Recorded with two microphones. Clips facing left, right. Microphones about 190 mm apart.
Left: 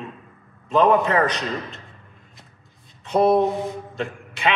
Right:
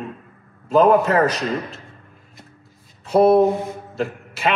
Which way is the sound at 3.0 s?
5° right (ahead or behind).